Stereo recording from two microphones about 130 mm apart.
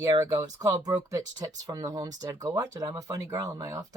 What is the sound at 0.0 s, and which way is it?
A woman's voice, 30° right (ahead or behind).